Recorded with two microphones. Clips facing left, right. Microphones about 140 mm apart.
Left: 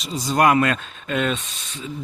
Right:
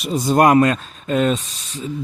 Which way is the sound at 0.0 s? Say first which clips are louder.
Right 4 dB; 50° right (ahead or behind).